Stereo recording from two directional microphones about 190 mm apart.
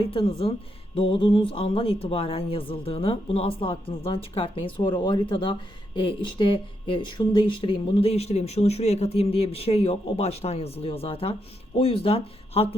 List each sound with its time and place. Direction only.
0.0 s speech: 30° left (ahead or behind)